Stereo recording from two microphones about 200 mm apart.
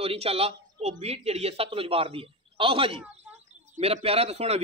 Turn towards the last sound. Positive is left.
turn(degrees=-30)  # may be behind; listen again after turning